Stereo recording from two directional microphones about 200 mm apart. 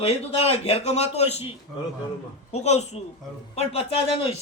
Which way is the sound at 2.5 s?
35° left (ahead or behind).